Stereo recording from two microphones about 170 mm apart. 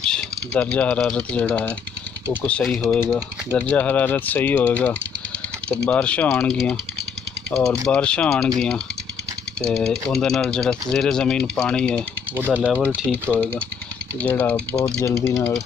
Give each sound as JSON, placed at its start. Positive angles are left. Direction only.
{"t": 0.0, "sound": "speech", "side_deg": 5}
{"t": 2.9, "sound": "speech", "side_deg": 10}
{"t": 7.8, "sound": "speech", "side_deg": 5}